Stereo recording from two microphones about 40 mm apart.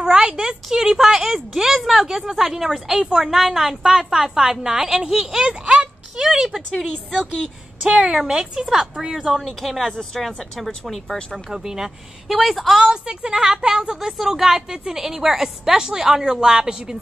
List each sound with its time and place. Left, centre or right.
0.0 s a sound: centre
0.7 s a woman's voice: centre
5.4 s a sound: right
7.8 s a woman's voice: centre
9.7 s a woman's voice: centre
10.1 s a woman's voice: centre
11.5 s a woman's voice: centre
12.3 s a woman's voice: centre
12.7 s a woman's voice: right
14.1 s a woman's voice: centre